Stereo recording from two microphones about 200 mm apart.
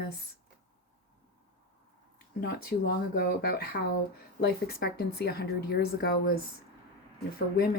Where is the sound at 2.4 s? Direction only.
50° left (ahead or behind).